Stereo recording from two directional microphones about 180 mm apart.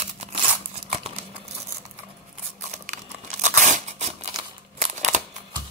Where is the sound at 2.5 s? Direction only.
40° right (ahead or behind).